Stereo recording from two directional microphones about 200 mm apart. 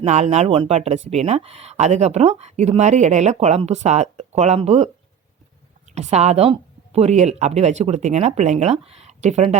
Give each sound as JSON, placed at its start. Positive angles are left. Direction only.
{"t": 0.0, "sound": "speech", "side_deg": -35}
{"t": 5.9, "sound": "speech", "side_deg": -35}